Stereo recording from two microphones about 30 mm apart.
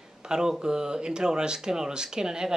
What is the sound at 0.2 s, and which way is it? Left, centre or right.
Speech, right.